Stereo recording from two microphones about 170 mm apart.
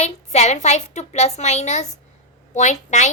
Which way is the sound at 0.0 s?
40° left (ahead or behind).